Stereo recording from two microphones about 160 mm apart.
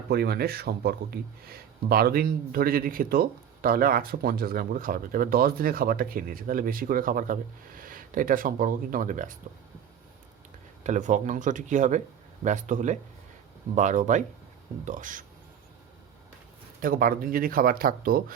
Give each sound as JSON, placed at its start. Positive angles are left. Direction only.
{"t": 0.1, "sound": "speech", "side_deg": -75}
{"t": 10.8, "sound": "speech", "side_deg": -50}
{"t": 16.8, "sound": "speech", "side_deg": -60}